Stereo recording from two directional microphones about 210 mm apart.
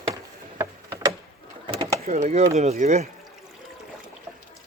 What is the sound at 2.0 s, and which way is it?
Speech, 35° right (ahead or behind).